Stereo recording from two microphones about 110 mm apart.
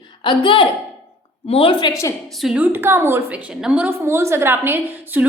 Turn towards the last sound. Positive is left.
turn(degrees=-20)  # may be behind; listen again after turning